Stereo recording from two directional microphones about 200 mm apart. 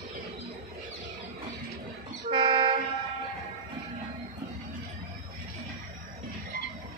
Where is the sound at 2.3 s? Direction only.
25° right (ahead or behind).